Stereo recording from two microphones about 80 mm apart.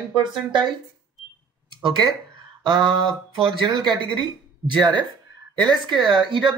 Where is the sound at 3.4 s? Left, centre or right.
Right.